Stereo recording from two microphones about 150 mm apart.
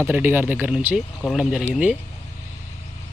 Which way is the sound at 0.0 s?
15° right (ahead or behind).